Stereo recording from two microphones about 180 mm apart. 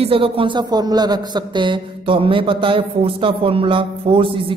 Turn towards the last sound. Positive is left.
turn(degrees=-30)  # may be behind; listen again after turning